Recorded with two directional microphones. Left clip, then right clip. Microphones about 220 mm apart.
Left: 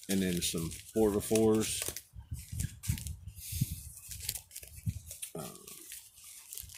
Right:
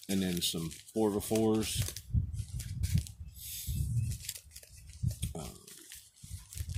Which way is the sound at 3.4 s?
15° right (ahead or behind).